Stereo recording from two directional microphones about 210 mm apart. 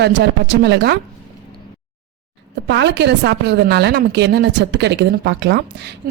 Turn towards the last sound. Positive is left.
turn(degrees=-55)  # may be behind; listen again after turning